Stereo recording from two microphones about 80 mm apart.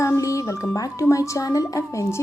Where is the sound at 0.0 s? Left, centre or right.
Left.